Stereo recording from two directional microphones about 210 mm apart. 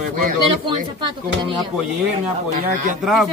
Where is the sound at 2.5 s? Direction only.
40° right (ahead or behind).